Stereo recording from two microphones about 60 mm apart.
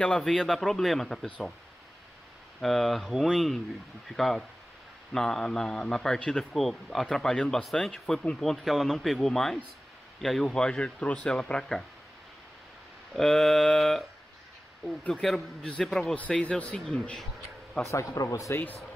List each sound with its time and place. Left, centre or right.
0.0 s speech: centre
2.6 s speech: centre
6.5 s speech: centre
8.4 s speech: centre
13.1 s speech: centre
15.2 s speech: centre
16.2 s speech: centre
17.9 s speech: left